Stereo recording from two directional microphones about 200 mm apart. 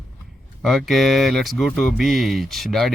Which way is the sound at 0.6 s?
Centre (ahead or behind).